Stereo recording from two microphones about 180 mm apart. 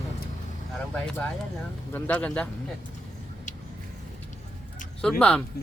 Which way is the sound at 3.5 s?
45° left (ahead or behind).